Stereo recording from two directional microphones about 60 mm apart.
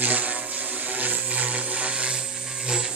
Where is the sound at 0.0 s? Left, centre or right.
Right.